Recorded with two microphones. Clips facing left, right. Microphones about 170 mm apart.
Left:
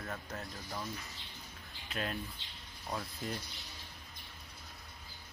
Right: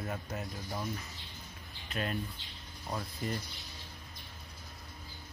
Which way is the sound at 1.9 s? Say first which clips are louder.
Right 3 dB; centre (ahead or behind).